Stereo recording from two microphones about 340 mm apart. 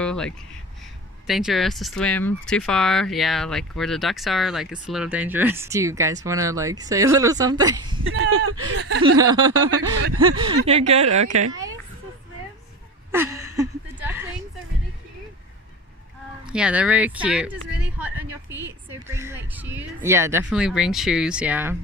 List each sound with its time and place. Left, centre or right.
0.0 s speech: centre
8.2 s speech: right
9.0 s speech: centre
9.5 s speech: right
10.7 s speech: centre
13.1 s a sound: centre
16.5 s speech: centre